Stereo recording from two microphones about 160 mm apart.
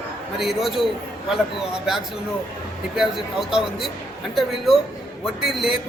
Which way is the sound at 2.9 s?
Centre (ahead or behind).